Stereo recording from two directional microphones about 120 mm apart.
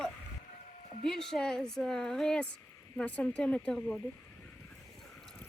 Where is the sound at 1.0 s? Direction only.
5° left (ahead or behind).